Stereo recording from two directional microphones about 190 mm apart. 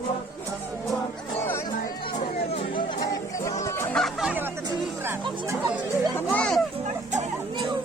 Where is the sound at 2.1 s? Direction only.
30° left (ahead or behind); by 4.4 s 5° right (ahead or behind).